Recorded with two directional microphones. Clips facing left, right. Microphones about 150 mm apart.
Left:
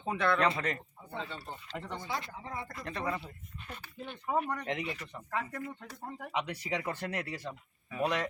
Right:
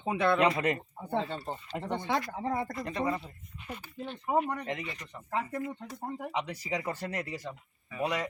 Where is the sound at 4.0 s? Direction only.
25° right (ahead or behind).